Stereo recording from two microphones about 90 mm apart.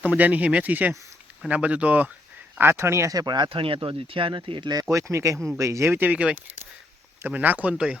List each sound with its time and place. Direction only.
0.0 s speech: 15° right (ahead or behind); by 3.5 s 55° right (ahead or behind)
3.5 s speech: 80° right; by 4.7 s 65° right (ahead or behind)
4.7 s speech: 40° right (ahead or behind); by 7.9 s 10° right (ahead or behind)